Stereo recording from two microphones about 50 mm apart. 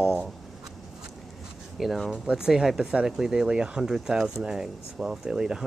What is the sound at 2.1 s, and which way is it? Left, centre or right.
Speech, centre.